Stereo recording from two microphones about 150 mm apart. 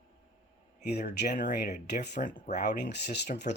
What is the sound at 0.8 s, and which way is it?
Speech, 90° left.